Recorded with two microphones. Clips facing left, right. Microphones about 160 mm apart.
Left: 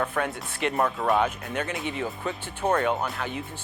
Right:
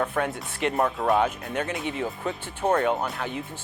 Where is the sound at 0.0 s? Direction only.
20° right (ahead or behind).